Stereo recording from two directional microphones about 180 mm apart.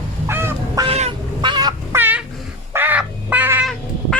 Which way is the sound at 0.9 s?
35° right (ahead or behind).